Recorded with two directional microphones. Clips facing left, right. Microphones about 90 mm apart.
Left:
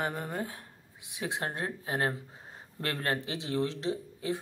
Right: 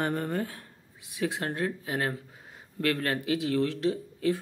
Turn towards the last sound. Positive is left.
turn(degrees=20)  # may be behind; listen again after turning